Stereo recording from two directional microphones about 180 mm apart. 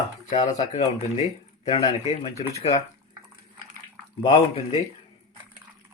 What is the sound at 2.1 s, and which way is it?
Speech, 35° left (ahead or behind).